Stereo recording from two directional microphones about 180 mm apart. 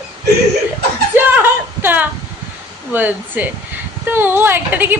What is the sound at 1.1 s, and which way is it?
A woman's voice, 10° right (ahead or behind).